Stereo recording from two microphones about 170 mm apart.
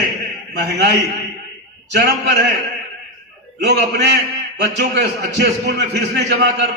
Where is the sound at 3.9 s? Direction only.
85° right.